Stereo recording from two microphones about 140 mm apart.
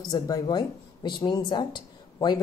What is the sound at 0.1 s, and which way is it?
A woman's voice, 30° left (ahead or behind).